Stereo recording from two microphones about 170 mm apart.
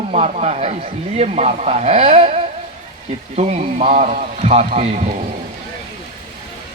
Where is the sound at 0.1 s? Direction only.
40° right (ahead or behind).